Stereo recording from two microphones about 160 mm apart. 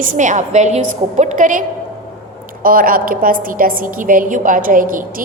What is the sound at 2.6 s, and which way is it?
A woman's voice, 60° right (ahead or behind).